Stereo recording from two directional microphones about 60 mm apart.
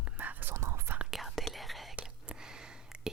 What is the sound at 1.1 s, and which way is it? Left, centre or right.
Whispering, centre.